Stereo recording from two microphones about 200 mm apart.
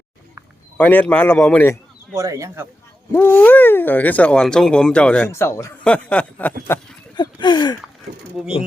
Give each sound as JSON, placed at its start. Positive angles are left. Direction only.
{"t": 0.8, "sound": "a man's voice", "side_deg": 10}
{"t": 2.1, "sound": "speech", "side_deg": -15}
{"t": 3.1, "sound": "speech", "side_deg": 10}
{"t": 7.2, "sound": "a sound", "side_deg": 20}
{"t": 8.1, "sound": "speech", "side_deg": -50}